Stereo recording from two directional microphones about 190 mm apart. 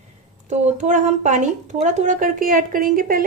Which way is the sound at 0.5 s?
35° right (ahead or behind).